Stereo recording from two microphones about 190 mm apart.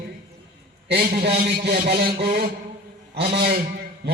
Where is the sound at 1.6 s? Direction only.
55° right (ahead or behind).